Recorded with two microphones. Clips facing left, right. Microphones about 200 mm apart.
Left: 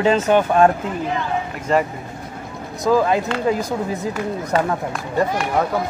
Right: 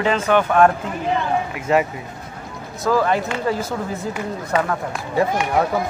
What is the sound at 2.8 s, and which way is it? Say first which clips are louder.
Speech: left 2 dB; 20° left (ahead or behind).